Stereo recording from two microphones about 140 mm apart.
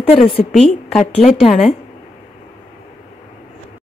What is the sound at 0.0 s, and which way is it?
Speech, 50° left (ahead or behind).